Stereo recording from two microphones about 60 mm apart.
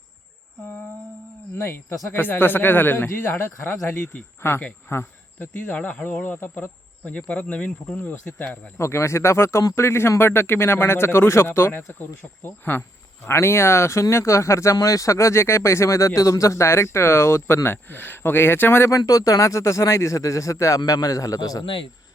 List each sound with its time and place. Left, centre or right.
1.5 s speech: left
4.9 s cricket: left
5.7 s speech: left
7.0 s speech: left
8.8 s speech: left
11.9 s speech: left
18.9 s speech: left